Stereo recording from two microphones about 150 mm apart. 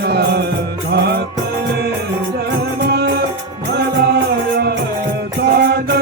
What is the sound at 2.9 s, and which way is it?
Music, 90° right.